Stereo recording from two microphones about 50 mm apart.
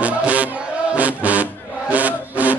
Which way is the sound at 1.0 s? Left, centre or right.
Right.